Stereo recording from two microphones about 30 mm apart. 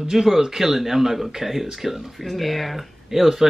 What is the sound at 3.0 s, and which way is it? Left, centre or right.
Speech, centre.